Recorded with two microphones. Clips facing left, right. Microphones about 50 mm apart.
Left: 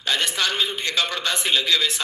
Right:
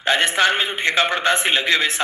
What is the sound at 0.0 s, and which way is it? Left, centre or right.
A man's voice, right.